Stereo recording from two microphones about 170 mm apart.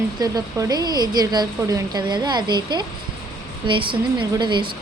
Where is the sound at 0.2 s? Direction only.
25° right (ahead or behind).